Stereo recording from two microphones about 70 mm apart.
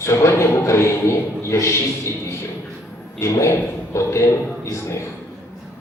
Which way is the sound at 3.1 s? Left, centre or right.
Left.